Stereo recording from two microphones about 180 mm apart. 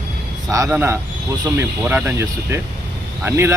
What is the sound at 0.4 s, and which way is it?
Speech, 20° right (ahead or behind).